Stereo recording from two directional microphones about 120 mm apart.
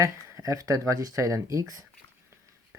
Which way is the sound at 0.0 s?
25° right (ahead or behind).